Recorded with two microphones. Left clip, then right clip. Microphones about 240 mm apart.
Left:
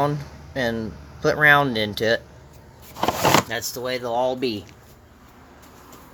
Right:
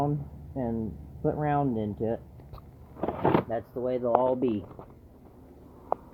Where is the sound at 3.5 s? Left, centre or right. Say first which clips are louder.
Left 4 dB; centre.